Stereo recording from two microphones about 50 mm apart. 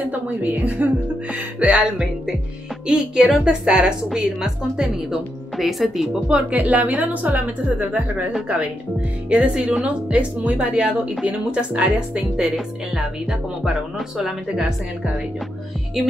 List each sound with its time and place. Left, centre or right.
0.0 s a woman's voice: right
1.9 s a woman's voice: centre
6.2 s speech: right
9.3 s a woman's voice: right
13.9 s speech: centre
16.0 s speech: centre